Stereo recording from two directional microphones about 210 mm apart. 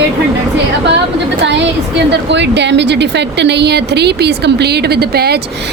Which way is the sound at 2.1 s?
55° right (ahead or behind).